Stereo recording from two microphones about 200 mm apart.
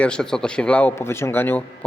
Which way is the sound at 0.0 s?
5° left (ahead or behind).